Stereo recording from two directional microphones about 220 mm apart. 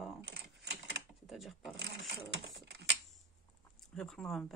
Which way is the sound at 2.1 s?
50° right (ahead or behind).